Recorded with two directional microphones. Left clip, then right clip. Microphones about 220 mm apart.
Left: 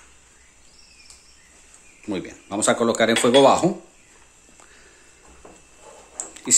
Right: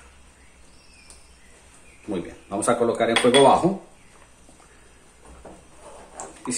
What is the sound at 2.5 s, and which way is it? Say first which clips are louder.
Speech: left 1 dB; 45° left (ahead or behind).